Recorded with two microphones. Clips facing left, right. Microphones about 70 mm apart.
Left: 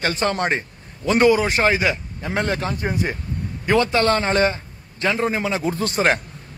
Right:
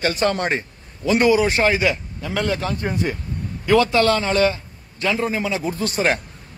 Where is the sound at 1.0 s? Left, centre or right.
Left.